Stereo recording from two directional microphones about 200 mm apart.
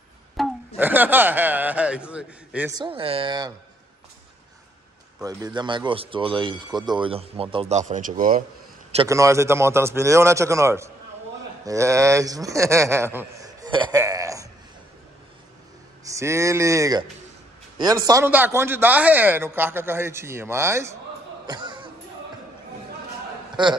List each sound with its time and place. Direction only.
0.4 s speech: 10° right (ahead or behind)
2.7 s speech: 25° right (ahead or behind)
5.2 s speech: 20° right (ahead or behind); by 8.5 s 40° right (ahead or behind)
9.1 s a man's voice: 15° right (ahead or behind)
16.0 s speech: 15° right (ahead or behind)
21.5 s a sound: 20° right (ahead or behind)
23.5 s a man's voice: 20° right (ahead or behind)